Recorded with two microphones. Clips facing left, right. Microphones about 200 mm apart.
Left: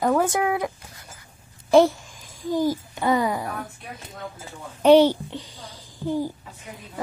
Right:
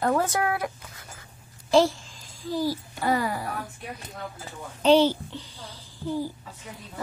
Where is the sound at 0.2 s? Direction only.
15° left (ahead or behind).